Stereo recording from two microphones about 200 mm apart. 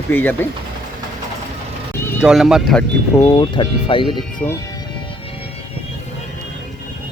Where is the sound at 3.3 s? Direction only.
25° left (ahead or behind).